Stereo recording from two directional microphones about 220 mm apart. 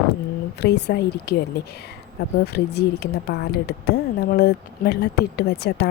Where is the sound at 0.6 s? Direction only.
50° left (ahead or behind).